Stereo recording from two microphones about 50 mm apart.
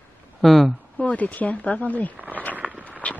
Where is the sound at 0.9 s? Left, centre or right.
Left.